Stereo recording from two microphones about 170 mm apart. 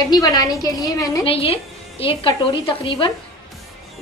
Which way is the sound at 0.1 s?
20° left (ahead or behind).